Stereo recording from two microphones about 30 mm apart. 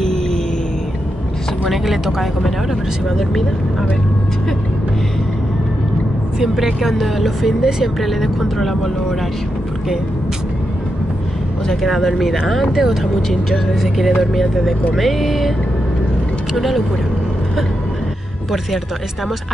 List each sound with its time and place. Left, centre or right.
0.0 s music: centre
1.7 s speech: centre
6.4 s speech: centre
8.5 s speech: centre
11.7 s speech: centre
16.5 s speech: centre